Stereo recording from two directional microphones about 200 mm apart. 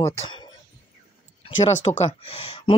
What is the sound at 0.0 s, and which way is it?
Speech, 30° left (ahead or behind).